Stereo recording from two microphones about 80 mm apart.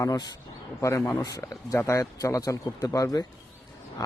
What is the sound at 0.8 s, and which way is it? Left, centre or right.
Speech, left.